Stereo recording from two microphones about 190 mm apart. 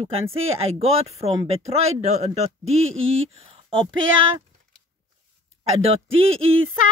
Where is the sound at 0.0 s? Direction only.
30° right (ahead or behind).